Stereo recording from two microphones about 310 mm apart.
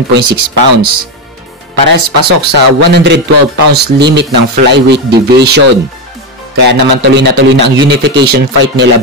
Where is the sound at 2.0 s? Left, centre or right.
Right.